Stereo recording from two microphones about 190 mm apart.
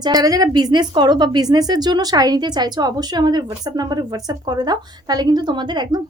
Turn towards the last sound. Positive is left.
turn(degrees=-20)  # may be behind; listen again after turning